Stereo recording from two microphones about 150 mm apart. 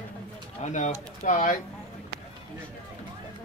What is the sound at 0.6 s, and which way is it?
Speech, 50° left (ahead or behind).